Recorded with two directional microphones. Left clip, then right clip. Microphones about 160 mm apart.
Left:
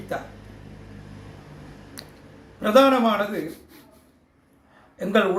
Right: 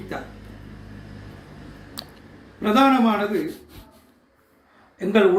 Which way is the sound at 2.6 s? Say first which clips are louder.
Left 1 dB; 35° left (ahead or behind).